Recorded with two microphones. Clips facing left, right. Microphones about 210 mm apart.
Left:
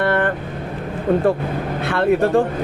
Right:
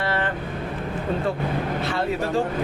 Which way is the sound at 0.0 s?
55° left (ahead or behind).